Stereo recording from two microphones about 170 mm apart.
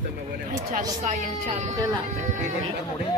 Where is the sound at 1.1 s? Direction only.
45° right (ahead or behind).